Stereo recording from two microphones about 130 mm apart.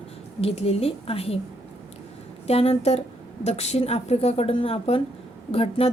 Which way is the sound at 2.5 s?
50° left (ahead or behind).